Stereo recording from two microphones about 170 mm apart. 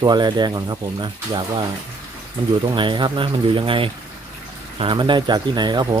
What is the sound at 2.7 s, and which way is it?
Speech, 30° right (ahead or behind).